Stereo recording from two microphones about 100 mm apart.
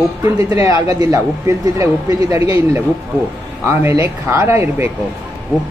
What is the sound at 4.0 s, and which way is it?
Speech, 30° right (ahead or behind).